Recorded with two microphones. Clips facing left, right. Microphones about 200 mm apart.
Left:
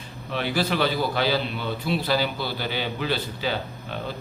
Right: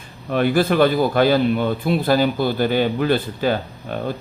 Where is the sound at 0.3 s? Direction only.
50° right (ahead or behind).